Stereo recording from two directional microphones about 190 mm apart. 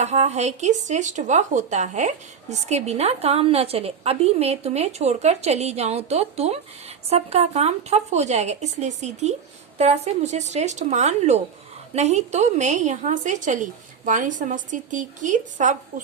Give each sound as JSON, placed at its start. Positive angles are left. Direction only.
{"t": 0.0, "sound": "speech", "side_deg": -35}